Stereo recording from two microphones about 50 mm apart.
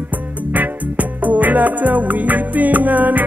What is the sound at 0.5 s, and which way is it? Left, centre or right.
Music, right.